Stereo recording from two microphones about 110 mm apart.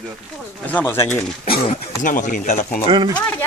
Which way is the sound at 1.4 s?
65° left (ahead or behind).